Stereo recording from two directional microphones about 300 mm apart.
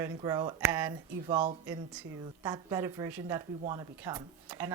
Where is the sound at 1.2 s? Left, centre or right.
Centre.